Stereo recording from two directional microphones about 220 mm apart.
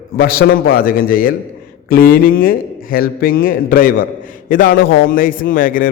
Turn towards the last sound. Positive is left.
turn(degrees=40)  # may be behind; listen again after turning